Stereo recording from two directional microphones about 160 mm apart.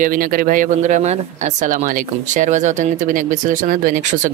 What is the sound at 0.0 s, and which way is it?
Speech, 60° right (ahead or behind).